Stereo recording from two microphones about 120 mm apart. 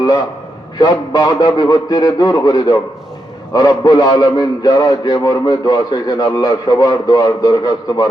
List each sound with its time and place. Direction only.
0.8 s a man's voice: 35° left (ahead or behind)